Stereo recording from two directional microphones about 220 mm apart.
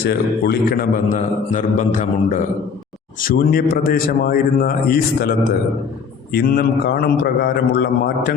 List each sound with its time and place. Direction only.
0.0 s a man's voice: 45° left (ahead or behind)
6.3 s a man's voice: 45° left (ahead or behind)